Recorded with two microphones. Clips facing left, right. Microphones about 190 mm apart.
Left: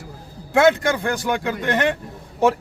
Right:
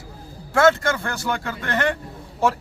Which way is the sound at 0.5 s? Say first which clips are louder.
Left 1 dB; 15° left (ahead or behind).